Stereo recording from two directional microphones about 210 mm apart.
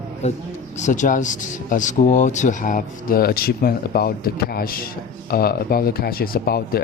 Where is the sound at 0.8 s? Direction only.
35° left (ahead or behind).